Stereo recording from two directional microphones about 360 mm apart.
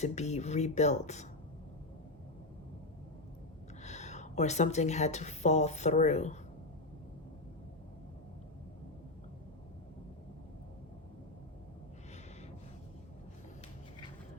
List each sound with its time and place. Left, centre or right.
0.0 s speech: centre
3.8 s speech: centre